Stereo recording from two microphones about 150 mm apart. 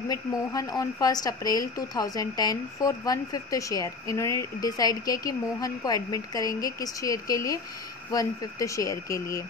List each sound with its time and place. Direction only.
0.1 s a woman's voice: 25° left (ahead or behind)